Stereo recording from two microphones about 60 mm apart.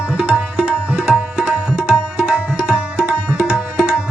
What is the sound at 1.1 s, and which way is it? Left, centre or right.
Tabla, centre.